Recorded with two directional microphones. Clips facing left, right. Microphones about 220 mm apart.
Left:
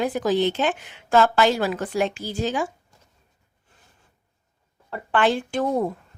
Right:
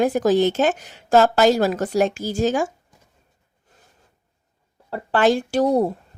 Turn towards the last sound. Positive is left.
turn(degrees=-40)  # may be behind; listen again after turning